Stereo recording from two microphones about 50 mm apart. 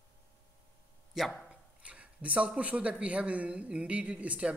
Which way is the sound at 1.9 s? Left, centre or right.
Right.